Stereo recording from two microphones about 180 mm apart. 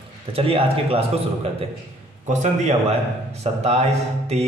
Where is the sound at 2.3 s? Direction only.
40° right (ahead or behind).